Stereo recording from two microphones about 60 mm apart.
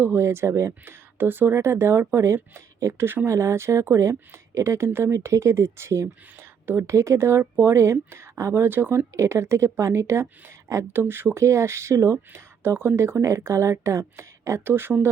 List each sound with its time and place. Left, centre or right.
0.0 s speech: right
6.3 s a sound: right
6.9 s speech: right
9.1 s speech: right
10.9 s speech: right
11.3 s speech: right